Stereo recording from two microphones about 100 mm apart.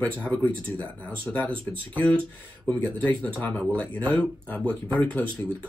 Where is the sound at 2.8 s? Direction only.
15° left (ahead or behind).